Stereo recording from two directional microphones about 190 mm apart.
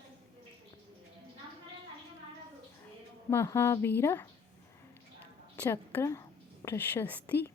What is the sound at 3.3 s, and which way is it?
A woman's voice, 15° left (ahead or behind).